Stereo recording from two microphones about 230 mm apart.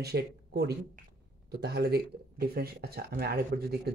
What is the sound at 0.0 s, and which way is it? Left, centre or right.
Speech, right.